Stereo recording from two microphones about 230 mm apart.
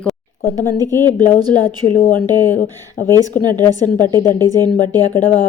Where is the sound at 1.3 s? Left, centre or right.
Centre.